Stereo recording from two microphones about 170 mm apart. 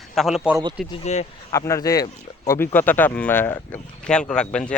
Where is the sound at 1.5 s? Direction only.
20° left (ahead or behind).